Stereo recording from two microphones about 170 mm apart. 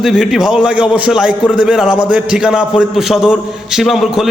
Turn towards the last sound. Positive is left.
turn(degrees=0)  # may be behind; listen again after turning